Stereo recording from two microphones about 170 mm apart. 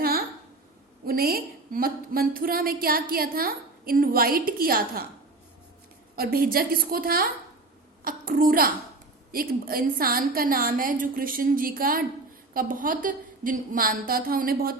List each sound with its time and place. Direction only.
0.0 s a sound: 65° right (ahead or behind)
1.0 s a woman's voice: 60° right (ahead or behind)
6.1 s a woman's voice: 60° right (ahead or behind)